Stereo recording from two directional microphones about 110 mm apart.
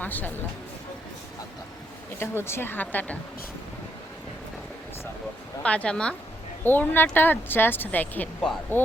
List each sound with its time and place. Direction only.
0.0 s speech: 15° left (ahead or behind)
2.1 s a woman's voice: 20° left (ahead or behind)
5.6 s speech: 10° left (ahead or behind)